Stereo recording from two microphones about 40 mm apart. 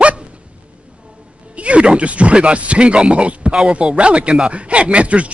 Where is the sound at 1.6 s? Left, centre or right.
Right.